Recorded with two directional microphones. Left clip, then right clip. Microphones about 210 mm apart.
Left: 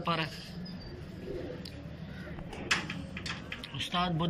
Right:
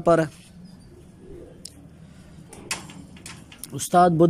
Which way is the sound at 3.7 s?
75° right (ahead or behind).